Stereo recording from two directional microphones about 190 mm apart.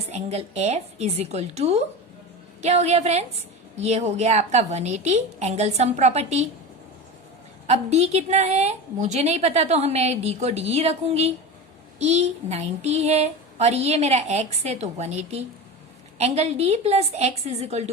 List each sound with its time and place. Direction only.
0.1 s a woman's voice: 35° right (ahead or behind)
7.7 s a woman's voice: 35° right (ahead or behind)